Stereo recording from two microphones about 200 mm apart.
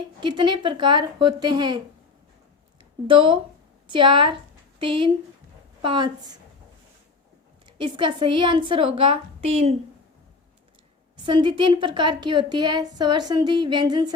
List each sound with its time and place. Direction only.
0.2 s speech: 25° right (ahead or behind)
3.9 s speech: 25° right (ahead or behind)
7.8 s speech: 25° right (ahead or behind)
11.3 s speech: 25° right (ahead or behind)